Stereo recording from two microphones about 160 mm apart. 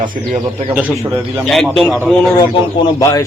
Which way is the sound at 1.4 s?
5° left (ahead or behind).